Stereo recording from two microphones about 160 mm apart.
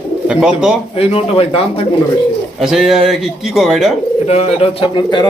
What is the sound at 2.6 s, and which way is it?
Speech, centre (ahead or behind).